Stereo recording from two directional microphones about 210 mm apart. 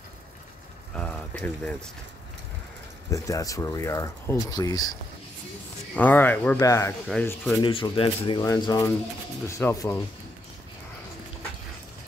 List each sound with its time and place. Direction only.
0.9 s a sound: 5° left (ahead or behind)
1.4 s speech: 5° left (ahead or behind)
3.1 s speech: 15° left (ahead or behind)
5.9 s speech: 10° left (ahead or behind)
7.6 s speech: 25° left (ahead or behind)